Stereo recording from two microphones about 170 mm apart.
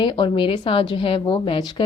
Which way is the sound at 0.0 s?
30° left (ahead or behind).